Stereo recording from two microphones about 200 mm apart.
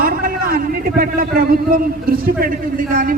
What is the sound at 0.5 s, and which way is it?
A man's voice, 45° right (ahead or behind).